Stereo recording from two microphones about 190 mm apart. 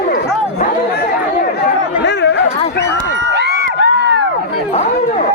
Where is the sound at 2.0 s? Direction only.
65° left (ahead or behind).